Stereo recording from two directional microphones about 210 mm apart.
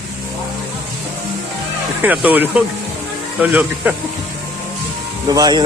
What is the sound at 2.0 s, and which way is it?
Speech, 5° right (ahead or behind).